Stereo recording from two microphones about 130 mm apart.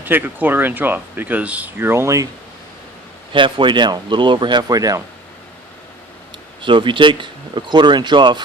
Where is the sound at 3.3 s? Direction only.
40° right (ahead or behind).